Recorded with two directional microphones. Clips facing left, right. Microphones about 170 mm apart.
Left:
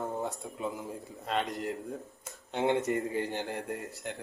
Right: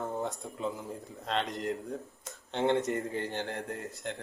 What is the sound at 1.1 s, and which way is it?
Speech, 5° left (ahead or behind).